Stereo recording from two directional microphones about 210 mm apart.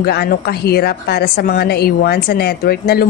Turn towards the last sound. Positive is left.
turn(degrees=45)  # may be behind; listen again after turning